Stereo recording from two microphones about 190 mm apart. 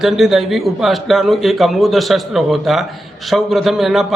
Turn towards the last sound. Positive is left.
turn(degrees=0)  # may be behind; listen again after turning